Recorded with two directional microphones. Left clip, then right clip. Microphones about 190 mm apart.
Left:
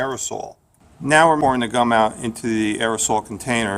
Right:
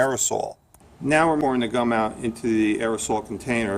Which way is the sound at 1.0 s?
40° left (ahead or behind).